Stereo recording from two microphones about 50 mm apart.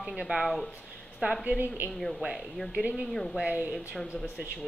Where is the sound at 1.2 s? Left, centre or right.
Right.